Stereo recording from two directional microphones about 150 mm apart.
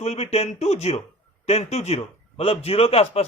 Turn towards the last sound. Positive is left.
turn(degrees=40)  # may be behind; listen again after turning